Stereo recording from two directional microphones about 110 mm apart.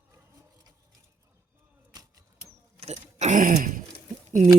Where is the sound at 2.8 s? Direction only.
70° right (ahead or behind).